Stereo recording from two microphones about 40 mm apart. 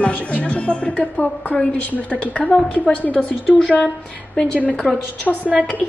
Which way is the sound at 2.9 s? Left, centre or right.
Left.